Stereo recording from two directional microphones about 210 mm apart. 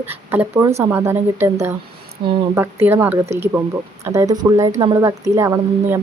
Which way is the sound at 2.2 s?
25° right (ahead or behind).